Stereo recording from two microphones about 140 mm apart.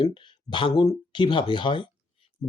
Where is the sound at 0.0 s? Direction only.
35° left (ahead or behind).